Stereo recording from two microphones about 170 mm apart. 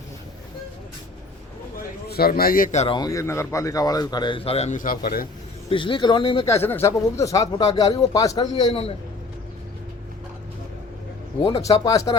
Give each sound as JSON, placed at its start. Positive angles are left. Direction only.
{"t": 2.0, "sound": "a man's voice", "side_deg": 65}
{"t": 2.7, "sound": "speech", "side_deg": 30}
{"t": 5.6, "sound": "speech", "side_deg": 30}
{"t": 6.6, "sound": "speech", "side_deg": 15}
{"t": 8.7, "sound": "a man's voice", "side_deg": 35}
{"t": 11.4, "sound": "speech", "side_deg": 20}